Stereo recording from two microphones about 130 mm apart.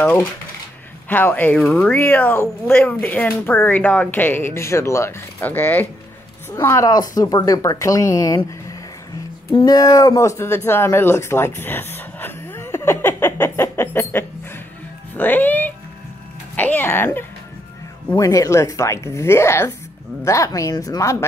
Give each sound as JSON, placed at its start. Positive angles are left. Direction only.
{"t": 1.0, "sound": "a woman's voice", "side_deg": 15}
{"t": 9.5, "sound": "a woman's voice", "side_deg": 35}